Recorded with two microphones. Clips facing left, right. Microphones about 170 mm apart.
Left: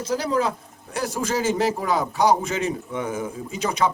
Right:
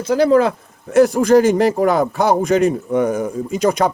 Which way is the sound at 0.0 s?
60° right (ahead or behind).